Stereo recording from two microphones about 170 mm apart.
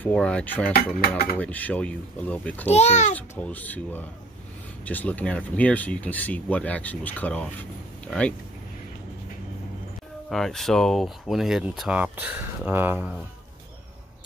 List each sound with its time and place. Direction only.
0.0 s speech: 5° left (ahead or behind)
2.7 s a child's voice: 40° left (ahead or behind)
3.2 s speech: 10° left (ahead or behind)
10.3 s speech: centre (ahead or behind)